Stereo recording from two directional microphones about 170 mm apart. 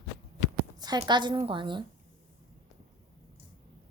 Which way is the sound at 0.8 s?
25° right (ahead or behind).